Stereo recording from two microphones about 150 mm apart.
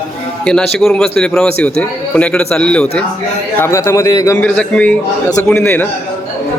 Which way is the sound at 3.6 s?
20° left (ahead or behind).